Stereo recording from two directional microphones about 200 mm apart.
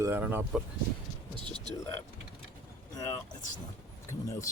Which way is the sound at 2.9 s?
15° left (ahead or behind).